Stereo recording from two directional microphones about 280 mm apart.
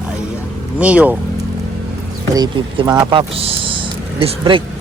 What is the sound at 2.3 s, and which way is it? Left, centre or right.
Speech, centre.